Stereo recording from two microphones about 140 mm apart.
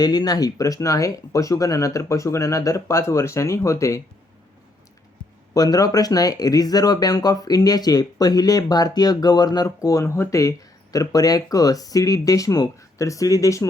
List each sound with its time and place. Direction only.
0.0 s speech: 30° left (ahead or behind)
5.5 s speech: 25° left (ahead or behind)